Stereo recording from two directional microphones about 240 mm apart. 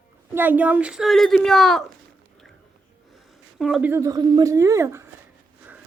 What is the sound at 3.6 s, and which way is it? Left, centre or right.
Speech, centre.